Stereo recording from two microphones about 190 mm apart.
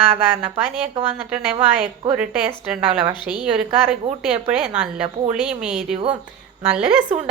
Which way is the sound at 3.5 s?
30° right (ahead or behind).